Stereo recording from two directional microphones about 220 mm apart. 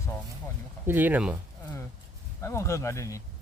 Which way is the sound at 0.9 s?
10° right (ahead or behind).